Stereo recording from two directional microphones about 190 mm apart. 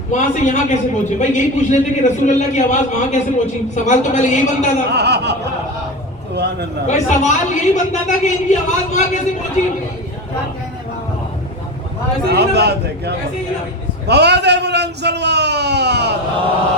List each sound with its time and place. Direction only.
0.1 s a man's voice: 40° left (ahead or behind)
4.9 s a man's voice: 60° right (ahead or behind)
6.8 s a man's voice: 35° left (ahead or behind)
12.3 s a man's voice: 60° right (ahead or behind)